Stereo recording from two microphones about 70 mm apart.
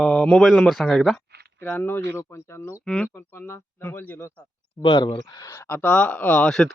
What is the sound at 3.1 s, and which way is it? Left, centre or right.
Speech, left.